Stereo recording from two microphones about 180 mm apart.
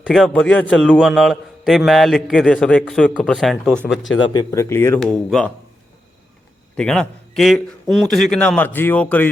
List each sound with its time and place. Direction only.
0.0 s a man's voice: 5° left (ahead or behind)
4.2 s a man's voice: 25° left (ahead or behind); by 5.5 s 5° left (ahead or behind)
6.7 s a man's voice: 5° left (ahead or behind)